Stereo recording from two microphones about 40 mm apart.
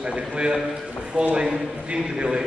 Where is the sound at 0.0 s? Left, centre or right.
Right.